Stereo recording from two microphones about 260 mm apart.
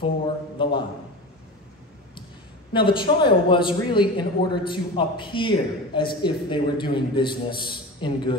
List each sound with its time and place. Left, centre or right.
0.6 s speech: centre
2.7 s speech: centre